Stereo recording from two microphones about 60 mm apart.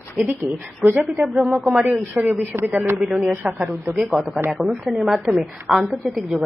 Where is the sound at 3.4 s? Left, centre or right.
Right.